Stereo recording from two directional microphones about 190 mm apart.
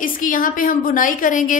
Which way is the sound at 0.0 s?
45° left (ahead or behind).